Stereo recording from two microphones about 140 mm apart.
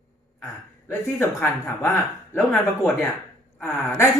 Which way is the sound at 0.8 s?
15° left (ahead or behind).